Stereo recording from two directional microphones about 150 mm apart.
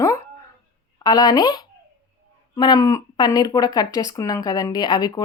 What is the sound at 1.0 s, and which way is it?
Speech, 25° left (ahead or behind).